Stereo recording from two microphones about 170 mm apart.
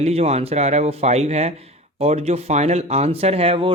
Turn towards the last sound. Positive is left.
turn(degrees=-35)  # may be behind; listen again after turning